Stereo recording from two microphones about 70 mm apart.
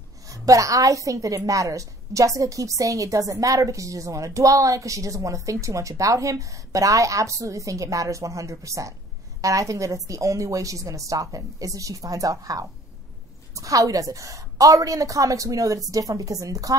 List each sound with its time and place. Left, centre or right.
0.3 s a woman's voice: right